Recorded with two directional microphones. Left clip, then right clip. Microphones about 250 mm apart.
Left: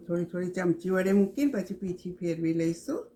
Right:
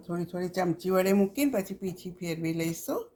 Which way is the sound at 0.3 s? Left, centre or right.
Right.